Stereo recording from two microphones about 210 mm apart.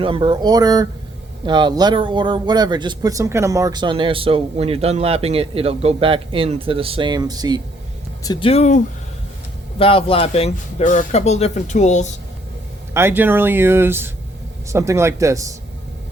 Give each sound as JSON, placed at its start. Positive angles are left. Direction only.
{"t": 0.0, "sound": "speech", "side_deg": -25}
{"t": 8.2, "sound": "speech", "side_deg": 20}
{"t": 12.9, "sound": "speech", "side_deg": -10}